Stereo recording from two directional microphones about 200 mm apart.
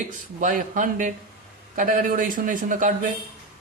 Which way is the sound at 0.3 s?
40° right (ahead or behind).